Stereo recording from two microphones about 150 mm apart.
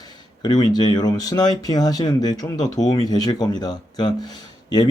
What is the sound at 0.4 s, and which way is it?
Speech, 25° left (ahead or behind).